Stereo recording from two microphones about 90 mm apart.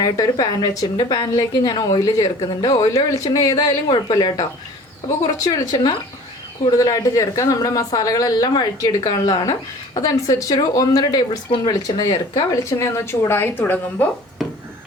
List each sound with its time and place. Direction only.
0.0 s a woman's voice: 45° left (ahead or behind); by 14.1 s 20° left (ahead or behind)